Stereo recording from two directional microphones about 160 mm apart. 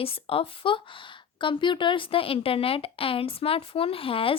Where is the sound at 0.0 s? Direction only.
35° left (ahead or behind).